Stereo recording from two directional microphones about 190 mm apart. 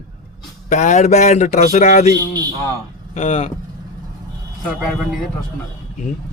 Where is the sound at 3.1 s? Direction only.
35° left (ahead or behind).